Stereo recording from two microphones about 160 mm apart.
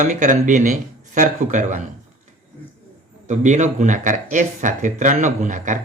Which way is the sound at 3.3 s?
50° right (ahead or behind).